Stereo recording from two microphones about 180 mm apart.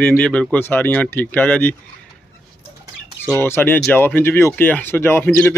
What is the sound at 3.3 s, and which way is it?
Speech, 15° left (ahead or behind).